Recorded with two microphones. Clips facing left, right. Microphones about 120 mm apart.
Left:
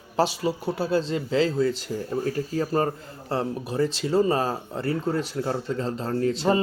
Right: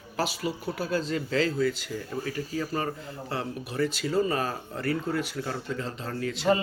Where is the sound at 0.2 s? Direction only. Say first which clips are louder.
Left 6 dB; 35° left (ahead or behind).